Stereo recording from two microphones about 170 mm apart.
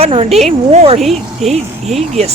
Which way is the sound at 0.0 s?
35° right (ahead or behind).